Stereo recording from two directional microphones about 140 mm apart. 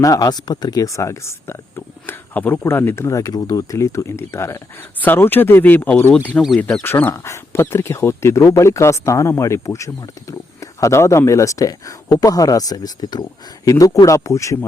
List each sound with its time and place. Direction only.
0.0 s speech: 25° left (ahead or behind); by 6.8 s 5° left (ahead or behind)
6.8 s speech: 15° left (ahead or behind)